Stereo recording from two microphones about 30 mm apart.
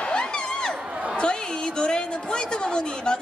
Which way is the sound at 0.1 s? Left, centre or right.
Left.